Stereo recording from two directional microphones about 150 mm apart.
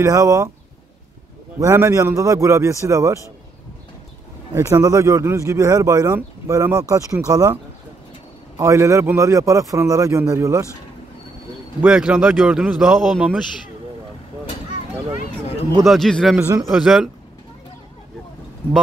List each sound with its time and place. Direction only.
0.0 s speech: 20° right (ahead or behind)
1.6 s speech: 20° right (ahead or behind)
4.6 s speech: 20° right (ahead or behind)
8.5 s speech: 20° right (ahead or behind)
11.8 s a man's voice: 5° right (ahead or behind)
15.8 s a man's voice: centre (ahead or behind)